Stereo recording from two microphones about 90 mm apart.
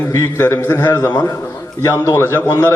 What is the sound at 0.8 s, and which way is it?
Speech, 50° left (ahead or behind).